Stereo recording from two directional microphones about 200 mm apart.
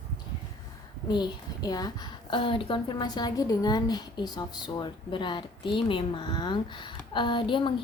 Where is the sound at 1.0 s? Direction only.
20° left (ahead or behind).